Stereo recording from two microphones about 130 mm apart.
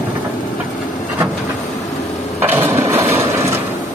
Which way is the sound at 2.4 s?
15° right (ahead or behind).